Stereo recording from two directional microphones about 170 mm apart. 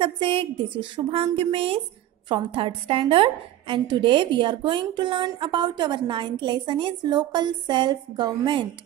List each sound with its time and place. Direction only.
0.0 s a woman's voice: 30° right (ahead or behind)